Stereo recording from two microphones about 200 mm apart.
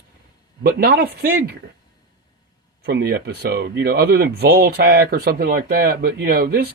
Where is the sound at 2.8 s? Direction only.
55° right (ahead or behind).